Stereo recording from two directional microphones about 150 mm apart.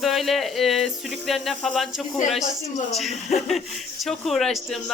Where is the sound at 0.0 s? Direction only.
Centre (ahead or behind).